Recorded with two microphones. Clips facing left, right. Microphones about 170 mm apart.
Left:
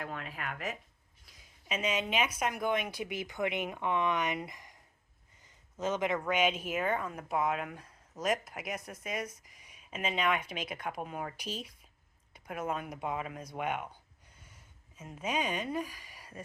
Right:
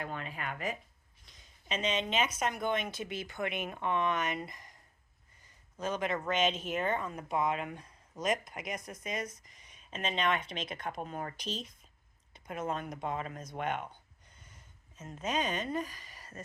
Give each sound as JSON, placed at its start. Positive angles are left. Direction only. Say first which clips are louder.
{"t": 0.0, "sound": "speech", "louder": "right 1 dB", "side_deg": 0}
{"t": 5.8, "sound": "speech", "louder": "left 2 dB", "side_deg": 20}